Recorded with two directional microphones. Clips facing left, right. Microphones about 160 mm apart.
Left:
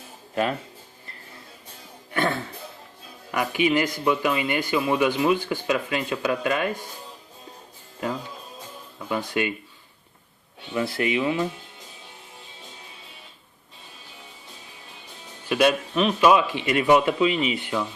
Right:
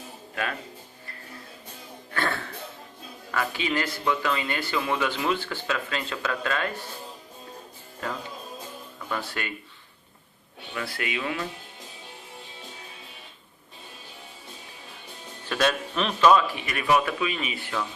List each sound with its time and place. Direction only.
2.1 s speech: 15° left (ahead or behind)
9.0 s speech: 15° left (ahead or behind)
10.8 s speech: 25° left (ahead or behind)
15.4 s speech: 10° left (ahead or behind)